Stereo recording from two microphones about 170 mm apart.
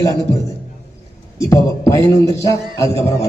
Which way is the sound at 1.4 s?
15° left (ahead or behind).